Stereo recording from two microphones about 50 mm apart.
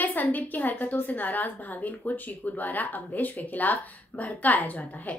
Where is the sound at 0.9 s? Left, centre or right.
Left.